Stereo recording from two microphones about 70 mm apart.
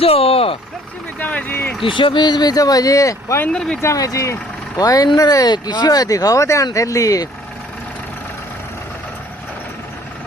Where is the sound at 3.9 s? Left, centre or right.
Left.